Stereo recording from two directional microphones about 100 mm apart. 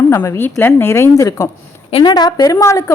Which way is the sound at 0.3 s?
25° left (ahead or behind).